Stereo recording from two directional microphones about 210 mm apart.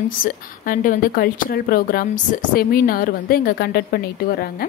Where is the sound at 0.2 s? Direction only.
40° left (ahead or behind).